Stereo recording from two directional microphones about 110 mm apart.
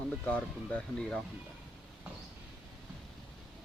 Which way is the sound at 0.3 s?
15° left (ahead or behind).